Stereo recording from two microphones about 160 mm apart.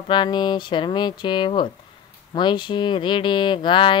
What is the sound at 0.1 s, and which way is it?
Speech, 30° left (ahead or behind).